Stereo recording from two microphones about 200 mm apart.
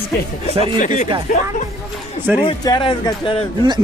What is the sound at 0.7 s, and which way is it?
Speech, 40° left (ahead or behind).